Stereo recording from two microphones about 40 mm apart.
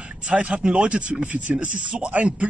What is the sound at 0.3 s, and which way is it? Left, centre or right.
Speech, right.